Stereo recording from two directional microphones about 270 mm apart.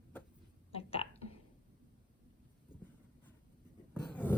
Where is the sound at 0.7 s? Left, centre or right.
Left.